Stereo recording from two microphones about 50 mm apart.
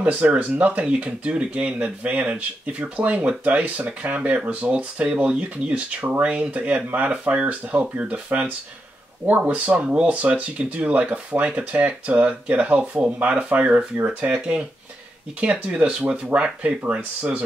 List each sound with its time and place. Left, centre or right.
0.0 s speech: right
7.1 s speech: centre
9.8 s speech: right